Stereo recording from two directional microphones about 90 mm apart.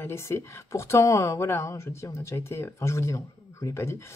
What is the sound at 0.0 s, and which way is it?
A woman's voice, 30° left (ahead or behind).